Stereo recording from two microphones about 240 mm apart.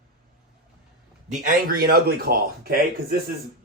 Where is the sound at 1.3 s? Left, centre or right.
Right.